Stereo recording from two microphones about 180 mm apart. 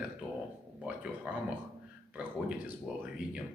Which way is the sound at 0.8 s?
5° right (ahead or behind).